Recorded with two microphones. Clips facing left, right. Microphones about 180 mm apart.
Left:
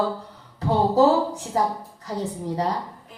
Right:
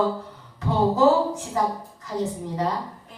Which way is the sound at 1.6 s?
35° left (ahead or behind).